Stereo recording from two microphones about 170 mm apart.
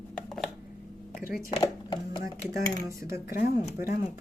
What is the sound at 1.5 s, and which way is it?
Speech, 25° left (ahead or behind).